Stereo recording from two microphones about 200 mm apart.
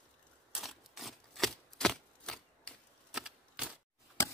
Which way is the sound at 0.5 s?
Centre (ahead or behind).